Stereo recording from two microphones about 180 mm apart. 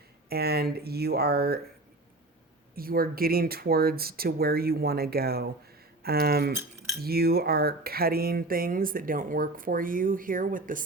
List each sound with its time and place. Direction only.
0.3 s speech: 60° right (ahead or behind)
2.7 s speech: 55° right (ahead or behind)